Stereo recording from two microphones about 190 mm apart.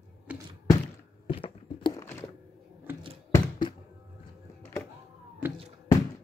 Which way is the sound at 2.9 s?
10° right (ahead or behind).